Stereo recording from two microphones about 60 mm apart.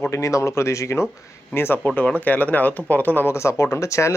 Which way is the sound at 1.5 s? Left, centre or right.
Left.